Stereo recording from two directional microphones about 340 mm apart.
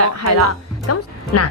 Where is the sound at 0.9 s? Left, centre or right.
Left.